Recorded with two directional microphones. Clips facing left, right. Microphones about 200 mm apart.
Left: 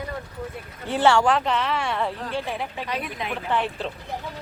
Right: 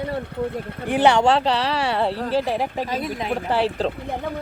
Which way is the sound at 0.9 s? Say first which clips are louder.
Right 2 dB; 20° right (ahead or behind).